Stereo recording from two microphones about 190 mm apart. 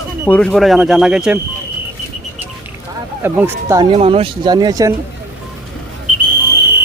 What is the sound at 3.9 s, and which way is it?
Speech, 30° right (ahead or behind).